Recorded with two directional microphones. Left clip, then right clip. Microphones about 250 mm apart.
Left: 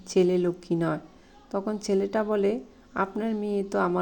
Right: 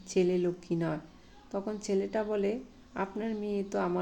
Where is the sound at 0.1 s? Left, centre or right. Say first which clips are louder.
Left 5 dB; centre.